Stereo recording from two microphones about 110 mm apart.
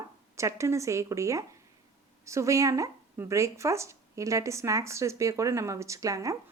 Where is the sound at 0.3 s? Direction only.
25° right (ahead or behind).